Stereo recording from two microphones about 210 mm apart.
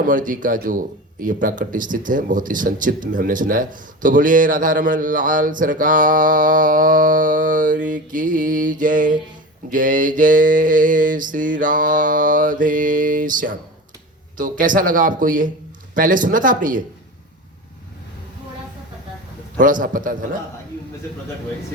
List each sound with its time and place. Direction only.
0.0 s speech: 40° right (ahead or behind)
19.5 s speech: 40° right (ahead or behind)